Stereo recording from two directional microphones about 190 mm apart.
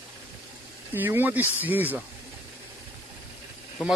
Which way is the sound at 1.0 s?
10° right (ahead or behind).